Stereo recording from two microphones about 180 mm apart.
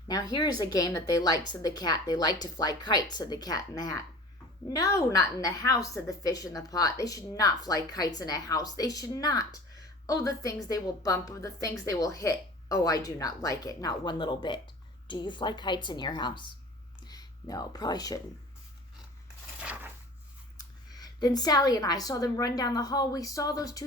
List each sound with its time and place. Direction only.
0.1 s a woman's voice: 20° left (ahead or behind)
19.6 s a sound: 10° right (ahead or behind)
20.9 s a woman's voice: 20° left (ahead or behind)